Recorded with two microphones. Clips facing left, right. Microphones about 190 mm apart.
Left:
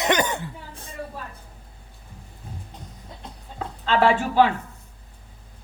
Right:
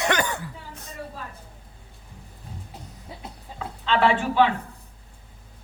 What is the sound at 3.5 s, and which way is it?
Speech, 40° left (ahead or behind).